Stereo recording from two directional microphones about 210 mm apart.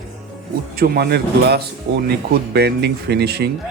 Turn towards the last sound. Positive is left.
turn(degrees=-50)  # may be behind; listen again after turning